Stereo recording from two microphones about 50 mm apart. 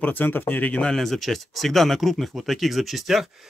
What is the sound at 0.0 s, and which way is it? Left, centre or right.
Speech, left.